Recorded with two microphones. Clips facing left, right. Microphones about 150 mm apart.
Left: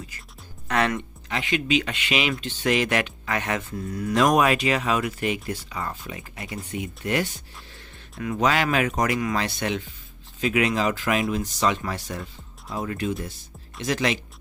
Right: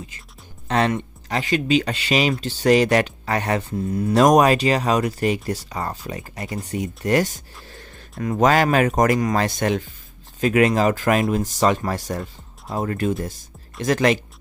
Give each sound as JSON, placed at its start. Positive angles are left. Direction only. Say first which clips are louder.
{"t": 0.7, "sound": "speech", "louder": "right 3 dB", "side_deg": -30}
{"t": 4.1, "sound": "speech", "louder": "right 5 dB", "side_deg": -40}